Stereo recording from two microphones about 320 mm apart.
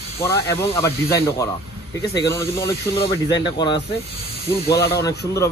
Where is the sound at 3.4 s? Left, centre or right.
Centre.